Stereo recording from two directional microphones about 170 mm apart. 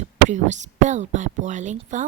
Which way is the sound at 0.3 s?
45° right (ahead or behind).